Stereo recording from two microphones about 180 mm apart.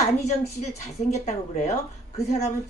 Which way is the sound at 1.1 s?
40° left (ahead or behind).